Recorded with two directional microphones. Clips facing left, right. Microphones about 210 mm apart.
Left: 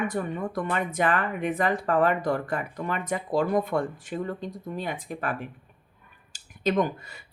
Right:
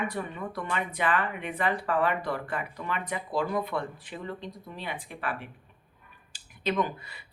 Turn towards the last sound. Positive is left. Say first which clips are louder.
# left 4 dB
turn(degrees=45)  # may be behind; listen again after turning